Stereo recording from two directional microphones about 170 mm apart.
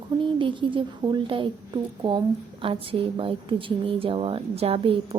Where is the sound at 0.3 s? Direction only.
30° right (ahead or behind).